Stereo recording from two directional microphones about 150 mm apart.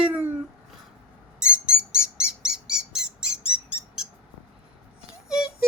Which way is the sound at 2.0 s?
5° right (ahead or behind).